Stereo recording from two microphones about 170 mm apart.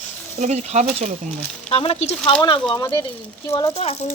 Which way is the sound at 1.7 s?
35° left (ahead or behind).